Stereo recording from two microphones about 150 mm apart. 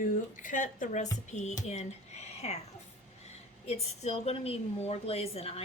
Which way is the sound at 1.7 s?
50° left (ahead or behind).